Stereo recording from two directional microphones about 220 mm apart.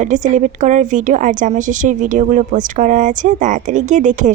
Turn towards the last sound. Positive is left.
turn(degrees=-35)  # may be behind; listen again after turning